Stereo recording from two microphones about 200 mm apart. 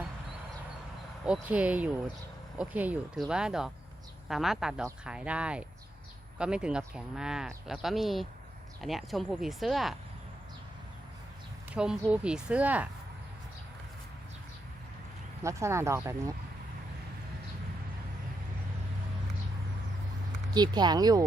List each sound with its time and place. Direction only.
1.2 s speech: 5° right (ahead or behind)
11.7 s speech: 5° right (ahead or behind)
15.4 s speech: 15° right (ahead or behind)
20.5 s speech: 20° right (ahead or behind)